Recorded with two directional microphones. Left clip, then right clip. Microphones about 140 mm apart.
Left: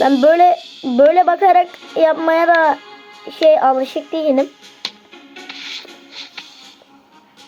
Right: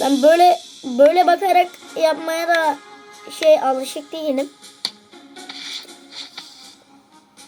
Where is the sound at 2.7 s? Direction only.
20° right (ahead or behind).